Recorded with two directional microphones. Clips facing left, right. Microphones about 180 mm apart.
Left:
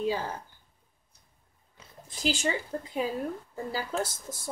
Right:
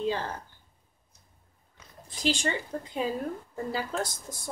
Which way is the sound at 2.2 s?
5° left (ahead or behind).